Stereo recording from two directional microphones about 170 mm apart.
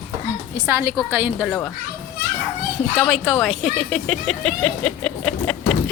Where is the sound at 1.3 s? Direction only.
5° left (ahead or behind).